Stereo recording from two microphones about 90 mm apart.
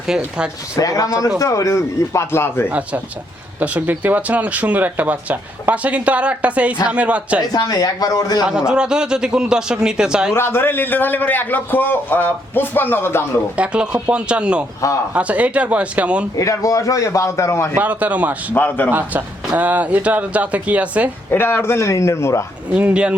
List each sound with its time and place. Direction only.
0.1 s speech: 10° right (ahead or behind)
0.8 s a man's voice: 40° left (ahead or behind)
2.3 s a man's voice: 25° left (ahead or behind)
2.6 s speech: 15° right (ahead or behind)
7.5 s speech: 50° left (ahead or behind)
8.4 s speech: 10° right (ahead or behind)
10.3 s a man's voice: 25° left (ahead or behind)
13.6 s speech: 10° right (ahead or behind)
16.4 s a man's voice: 40° left (ahead or behind)
17.7 s speech: 15° right (ahead or behind)
18.5 s a man's voice: 20° left (ahead or behind)
18.9 s speech: 20° right (ahead or behind)
21.2 s a man's voice: 25° left (ahead or behind)
22.7 s speech: 15° right (ahead or behind)